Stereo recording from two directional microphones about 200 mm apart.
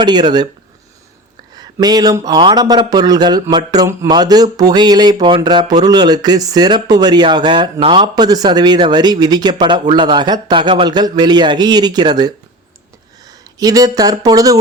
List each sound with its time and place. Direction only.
0.0 s speech: 20° right (ahead or behind)
1.5 s speech: 20° right (ahead or behind)